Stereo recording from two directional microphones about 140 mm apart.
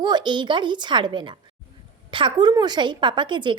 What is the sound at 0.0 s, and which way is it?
A woman's voice, 30° right (ahead or behind).